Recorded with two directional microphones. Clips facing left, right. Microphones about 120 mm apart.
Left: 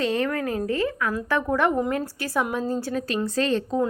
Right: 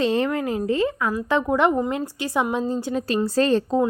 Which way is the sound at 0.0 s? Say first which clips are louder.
Right 3 dB; 30° right (ahead or behind).